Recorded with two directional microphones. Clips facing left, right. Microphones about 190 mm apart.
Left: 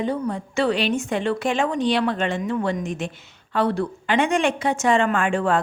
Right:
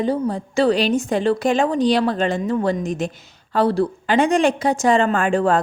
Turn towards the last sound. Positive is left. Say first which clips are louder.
# right 3 dB
turn(degrees=-40)  # may be behind; listen again after turning